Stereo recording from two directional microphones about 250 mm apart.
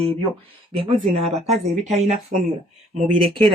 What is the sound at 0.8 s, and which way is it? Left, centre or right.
A woman's voice, right.